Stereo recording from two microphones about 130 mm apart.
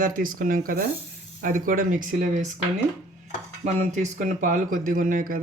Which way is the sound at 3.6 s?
70° right (ahead or behind).